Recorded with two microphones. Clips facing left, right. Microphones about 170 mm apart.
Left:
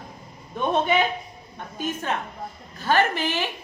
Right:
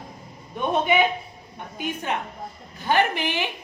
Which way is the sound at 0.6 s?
15° right (ahead or behind).